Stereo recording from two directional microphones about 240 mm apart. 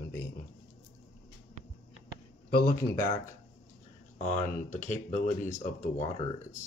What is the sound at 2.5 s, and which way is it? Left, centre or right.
Speech, left.